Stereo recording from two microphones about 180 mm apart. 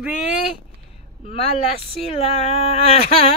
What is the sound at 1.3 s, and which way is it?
Speech, 35° left (ahead or behind).